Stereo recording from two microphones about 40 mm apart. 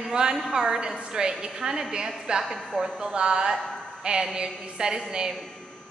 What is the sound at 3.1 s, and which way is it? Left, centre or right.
A woman's voice, right.